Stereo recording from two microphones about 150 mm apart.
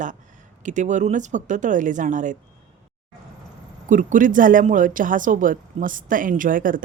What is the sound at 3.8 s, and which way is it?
Speech, 60° right (ahead or behind).